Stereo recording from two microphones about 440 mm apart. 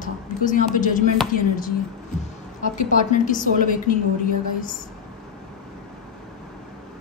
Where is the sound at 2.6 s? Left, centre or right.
Centre.